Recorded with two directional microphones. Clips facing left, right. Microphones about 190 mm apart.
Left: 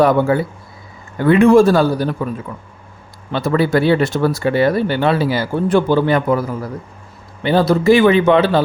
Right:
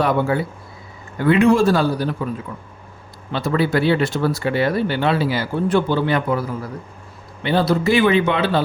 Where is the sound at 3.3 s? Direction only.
45° left (ahead or behind).